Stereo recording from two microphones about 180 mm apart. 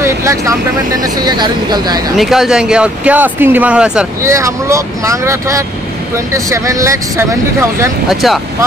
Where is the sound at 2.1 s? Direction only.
Centre (ahead or behind).